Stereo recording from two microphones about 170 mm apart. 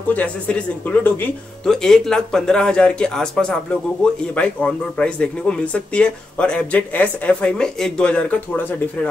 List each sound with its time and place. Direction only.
0.1 s speech: 10° left (ahead or behind)